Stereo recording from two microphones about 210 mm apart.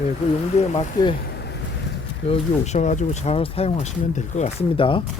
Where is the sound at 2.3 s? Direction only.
30° left (ahead or behind).